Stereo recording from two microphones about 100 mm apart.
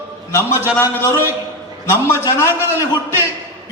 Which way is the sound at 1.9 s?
25° left (ahead or behind).